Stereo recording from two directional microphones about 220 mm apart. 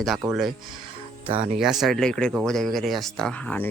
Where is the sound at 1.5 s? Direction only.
Centre (ahead or behind).